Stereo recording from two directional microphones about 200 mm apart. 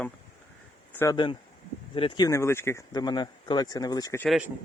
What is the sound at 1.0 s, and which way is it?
Speech, 20° left (ahead or behind).